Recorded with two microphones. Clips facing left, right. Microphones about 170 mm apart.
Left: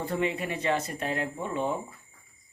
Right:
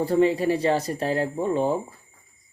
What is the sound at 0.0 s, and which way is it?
Speech, 35° right (ahead or behind).